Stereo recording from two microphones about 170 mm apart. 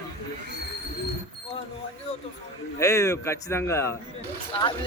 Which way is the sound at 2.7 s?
15° left (ahead or behind).